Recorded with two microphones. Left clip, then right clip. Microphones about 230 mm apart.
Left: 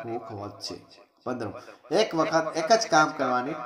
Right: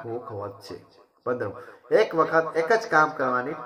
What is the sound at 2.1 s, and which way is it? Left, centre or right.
Speech, left.